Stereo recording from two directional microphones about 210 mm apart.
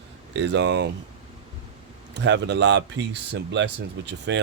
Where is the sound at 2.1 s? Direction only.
55° right (ahead or behind).